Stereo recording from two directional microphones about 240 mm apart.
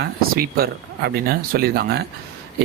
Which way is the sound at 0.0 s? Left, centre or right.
Right.